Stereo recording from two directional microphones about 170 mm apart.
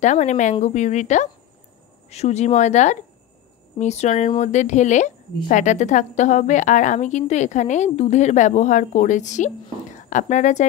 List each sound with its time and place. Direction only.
0.0 s a woman's voice: 45° left (ahead or behind)